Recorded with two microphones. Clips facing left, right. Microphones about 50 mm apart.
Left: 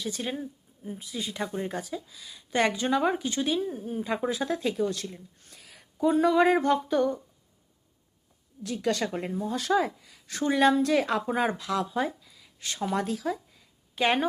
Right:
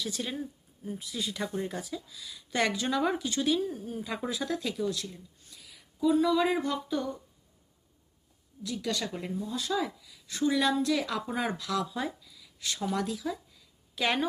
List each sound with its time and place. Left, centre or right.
0.0 s a woman's voice: left
8.6 s speech: left